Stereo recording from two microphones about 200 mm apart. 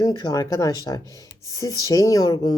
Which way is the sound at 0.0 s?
20° left (ahead or behind).